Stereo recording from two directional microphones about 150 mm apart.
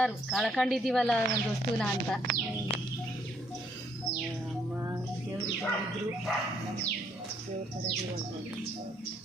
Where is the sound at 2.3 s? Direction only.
70° right (ahead or behind).